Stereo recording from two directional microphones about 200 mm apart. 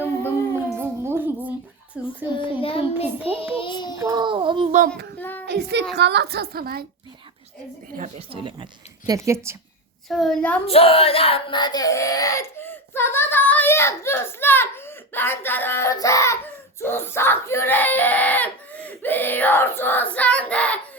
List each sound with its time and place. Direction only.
0.8 s music: 10° right (ahead or behind)
2.0 s child singing: 5° right (ahead or behind)
2.4 s child singing: 25° left (ahead or behind)
3.9 s a child's voice: 20° right (ahead or behind)
5.1 s a sound: 10° left (ahead or behind)
5.5 s a woman's voice: 55° right (ahead or behind)
8.3 s a child's voice: 25° right (ahead or behind)
9.0 s a woman's voice: 15° right (ahead or behind)
10.1 s a woman's voice: centre (ahead or behind)
10.7 s a sound: 30° left (ahead or behind); by 20.7 s 5° left (ahead or behind)